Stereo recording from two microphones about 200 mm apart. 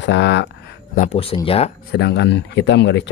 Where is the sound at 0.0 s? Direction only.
60° left (ahead or behind).